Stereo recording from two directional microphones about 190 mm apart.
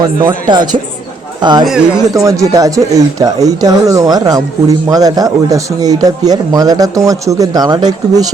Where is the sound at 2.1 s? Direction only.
15° right (ahead or behind).